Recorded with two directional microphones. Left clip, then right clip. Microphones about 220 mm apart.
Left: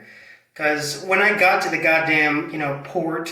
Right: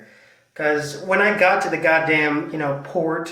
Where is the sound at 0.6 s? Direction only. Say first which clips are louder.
Right 1 dB; 35° left (ahead or behind).